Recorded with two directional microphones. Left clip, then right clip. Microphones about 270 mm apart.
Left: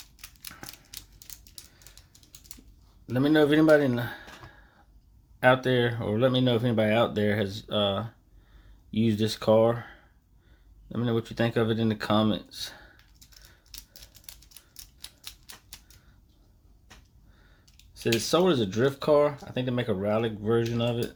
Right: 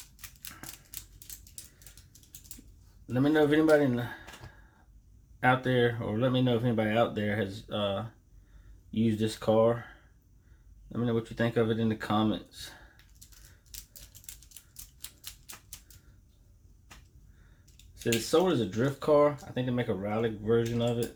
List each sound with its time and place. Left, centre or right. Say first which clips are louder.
0.5 s typewriter: left 3 dB; centre
3.1 s speech: left 3 dB; left
5.4 s speech: left 3 dB; left
10.9 s speech: left 2 dB; left
17.9 s speech: left 2 dB; left